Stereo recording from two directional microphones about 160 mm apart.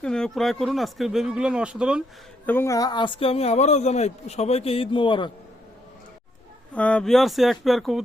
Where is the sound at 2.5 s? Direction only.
15° left (ahead or behind).